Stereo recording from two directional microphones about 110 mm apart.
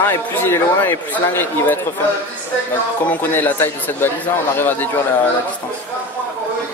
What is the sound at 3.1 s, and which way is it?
Speech, 20° left (ahead or behind).